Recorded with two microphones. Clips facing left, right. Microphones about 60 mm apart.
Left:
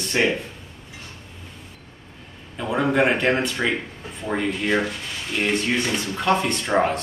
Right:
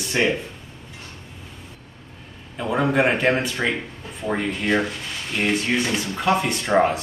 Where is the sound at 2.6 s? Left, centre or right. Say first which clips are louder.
Even; centre.